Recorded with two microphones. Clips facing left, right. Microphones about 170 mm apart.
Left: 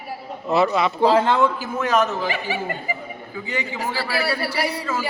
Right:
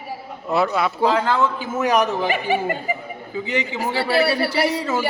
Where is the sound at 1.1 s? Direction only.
25° left (ahead or behind).